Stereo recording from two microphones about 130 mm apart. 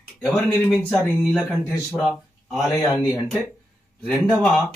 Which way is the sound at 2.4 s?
Centre (ahead or behind).